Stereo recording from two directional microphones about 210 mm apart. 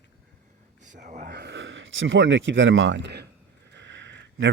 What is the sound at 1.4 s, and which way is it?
Speech, 60° right (ahead or behind).